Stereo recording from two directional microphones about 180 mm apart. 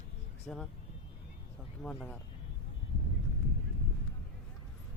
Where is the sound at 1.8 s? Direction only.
5° left (ahead or behind).